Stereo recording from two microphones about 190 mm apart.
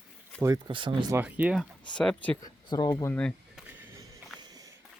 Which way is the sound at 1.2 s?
10° right (ahead or behind).